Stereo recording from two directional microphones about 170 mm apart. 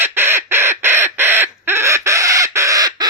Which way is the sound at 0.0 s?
15° right (ahead or behind).